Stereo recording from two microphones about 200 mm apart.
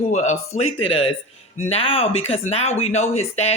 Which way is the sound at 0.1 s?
35° left (ahead or behind).